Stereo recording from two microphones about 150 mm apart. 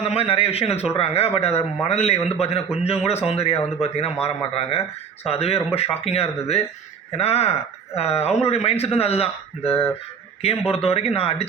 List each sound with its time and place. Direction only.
0.0 s a man's voice: 45° left (ahead or behind)